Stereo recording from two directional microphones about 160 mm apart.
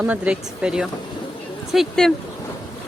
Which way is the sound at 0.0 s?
5° right (ahead or behind).